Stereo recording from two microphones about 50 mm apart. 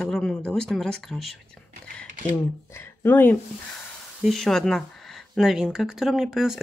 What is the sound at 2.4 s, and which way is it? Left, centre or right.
Speech, left.